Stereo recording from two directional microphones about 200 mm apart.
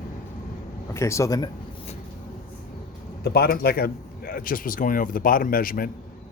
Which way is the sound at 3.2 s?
50° left (ahead or behind).